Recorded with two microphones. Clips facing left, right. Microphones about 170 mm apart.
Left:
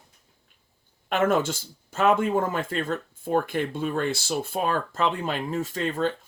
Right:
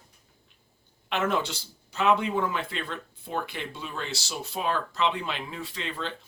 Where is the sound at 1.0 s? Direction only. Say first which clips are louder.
Left 5 dB; 50° left (ahead or behind).